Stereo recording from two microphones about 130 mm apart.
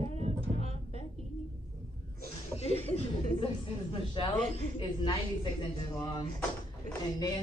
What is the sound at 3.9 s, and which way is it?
A woman's voice, 45° left (ahead or behind).